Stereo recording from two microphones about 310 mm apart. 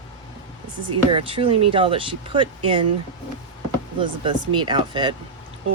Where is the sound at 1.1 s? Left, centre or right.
Centre.